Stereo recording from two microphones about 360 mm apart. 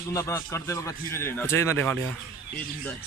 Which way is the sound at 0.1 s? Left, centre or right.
Centre.